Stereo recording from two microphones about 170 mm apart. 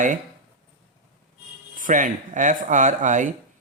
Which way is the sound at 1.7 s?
50° right (ahead or behind).